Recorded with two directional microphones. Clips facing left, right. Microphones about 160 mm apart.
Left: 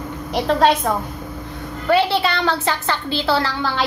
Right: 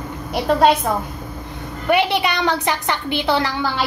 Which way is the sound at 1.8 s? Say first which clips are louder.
Left 1 dB; 15° right (ahead or behind).